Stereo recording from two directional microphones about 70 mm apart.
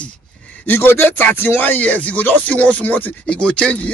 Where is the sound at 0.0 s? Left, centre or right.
Left.